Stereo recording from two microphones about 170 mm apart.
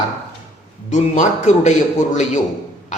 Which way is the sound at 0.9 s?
45° left (ahead or behind).